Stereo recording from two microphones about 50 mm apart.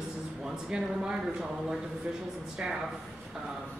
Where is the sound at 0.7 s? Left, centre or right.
Centre.